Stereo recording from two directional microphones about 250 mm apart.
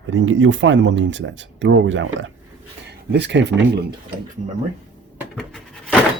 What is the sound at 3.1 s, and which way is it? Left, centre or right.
Speech, right.